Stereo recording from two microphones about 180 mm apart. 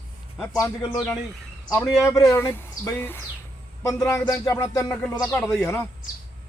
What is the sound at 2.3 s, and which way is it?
Speech, 15° left (ahead or behind).